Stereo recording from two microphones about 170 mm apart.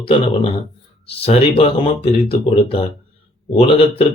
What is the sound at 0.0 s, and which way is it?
Speech, 30° left (ahead or behind).